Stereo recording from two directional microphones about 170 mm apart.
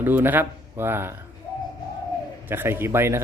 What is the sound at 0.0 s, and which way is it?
Speech, 10° right (ahead or behind).